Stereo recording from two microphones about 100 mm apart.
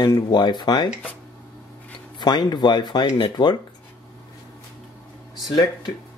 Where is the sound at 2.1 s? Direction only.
45° left (ahead or behind).